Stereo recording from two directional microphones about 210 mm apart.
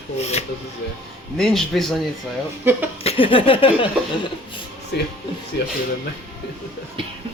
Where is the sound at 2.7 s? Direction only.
10° right (ahead or behind).